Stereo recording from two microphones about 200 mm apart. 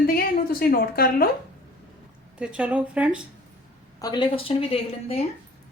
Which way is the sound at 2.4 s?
5° right (ahead or behind).